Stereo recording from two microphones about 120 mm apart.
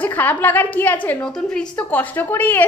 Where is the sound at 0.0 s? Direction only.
15° left (ahead or behind).